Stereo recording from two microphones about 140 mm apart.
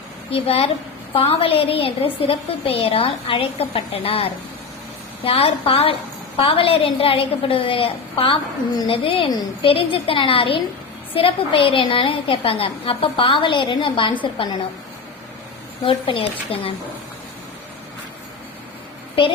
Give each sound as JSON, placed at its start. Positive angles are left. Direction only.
{"t": 0.3, "sound": "a woman's voice", "side_deg": 45}
{"t": 15.8, "sound": "a woman's voice", "side_deg": 40}